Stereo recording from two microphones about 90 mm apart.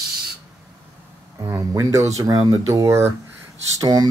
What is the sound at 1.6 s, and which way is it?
Speech, 40° right (ahead or behind).